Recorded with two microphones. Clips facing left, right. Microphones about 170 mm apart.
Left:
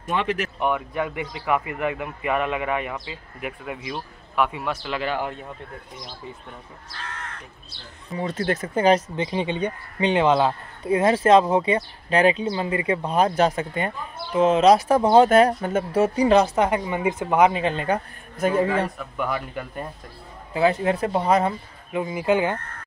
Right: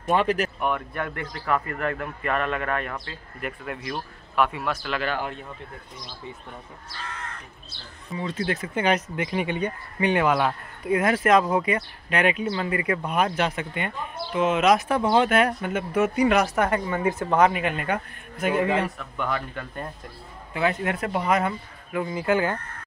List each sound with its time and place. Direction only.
0.0 s speech: 40° right (ahead or behind)
0.6 s speech: 15° left (ahead or behind)
4.6 s speech: 20° left (ahead or behind)
8.2 s speech: 45° left (ahead or behind); by 17.5 s 15° left (ahead or behind)
17.5 s speech: 30° left (ahead or behind)
18.9 s speech: 5° left (ahead or behind)
20.5 s speech: 35° left (ahead or behind)
22.0 s speech: 20° left (ahead or behind)